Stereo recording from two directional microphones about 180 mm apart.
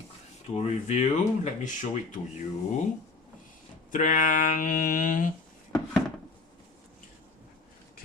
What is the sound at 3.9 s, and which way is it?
Speech, 45° left (ahead or behind).